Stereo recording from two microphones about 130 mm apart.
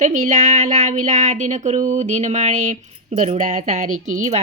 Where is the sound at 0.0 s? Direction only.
75° right (ahead or behind).